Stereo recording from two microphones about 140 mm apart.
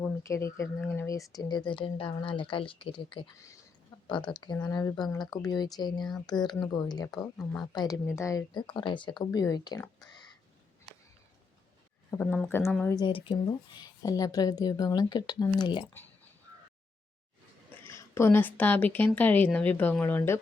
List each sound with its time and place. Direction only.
0.0 s speech: 20° left (ahead or behind); by 3.2 s 35° left (ahead or behind)
3.3 s speech: 20° left (ahead or behind)
4.3 s speech: 35° left (ahead or behind)
10.0 s a sound: 30° left (ahead or behind)
12.1 s speech: 20° left (ahead or behind)
13.1 s speech: 35° left (ahead or behind)
17.8 s a woman's voice: 20° left (ahead or behind)